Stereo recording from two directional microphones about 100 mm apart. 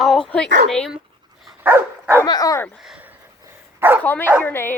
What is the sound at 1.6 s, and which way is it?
Dog, 25° right (ahead or behind).